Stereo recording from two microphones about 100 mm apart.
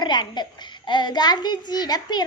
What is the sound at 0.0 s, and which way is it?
A child's voice, 45° left (ahead or behind).